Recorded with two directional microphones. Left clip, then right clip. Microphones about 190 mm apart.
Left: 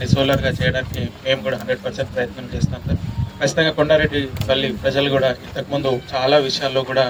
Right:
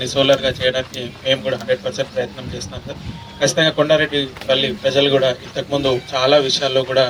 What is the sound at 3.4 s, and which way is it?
Speech, 45° right (ahead or behind).